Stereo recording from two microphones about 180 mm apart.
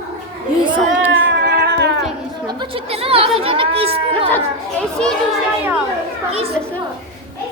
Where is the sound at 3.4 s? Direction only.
30° right (ahead or behind).